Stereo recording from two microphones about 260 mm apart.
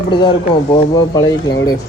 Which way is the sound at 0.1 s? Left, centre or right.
Centre.